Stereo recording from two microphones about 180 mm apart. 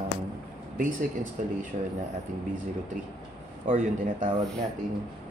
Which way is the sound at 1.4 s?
45° right (ahead or behind).